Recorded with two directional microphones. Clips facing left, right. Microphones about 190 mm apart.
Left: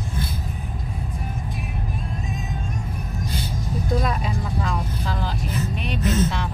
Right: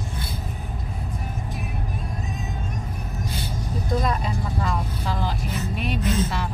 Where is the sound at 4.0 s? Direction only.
Centre (ahead or behind).